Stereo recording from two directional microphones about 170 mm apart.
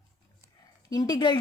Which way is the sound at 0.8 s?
20° left (ahead or behind).